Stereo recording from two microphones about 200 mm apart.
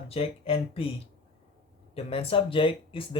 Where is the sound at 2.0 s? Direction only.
30° left (ahead or behind).